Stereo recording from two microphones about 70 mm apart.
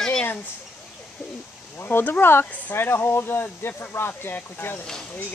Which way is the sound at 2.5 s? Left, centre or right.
Left.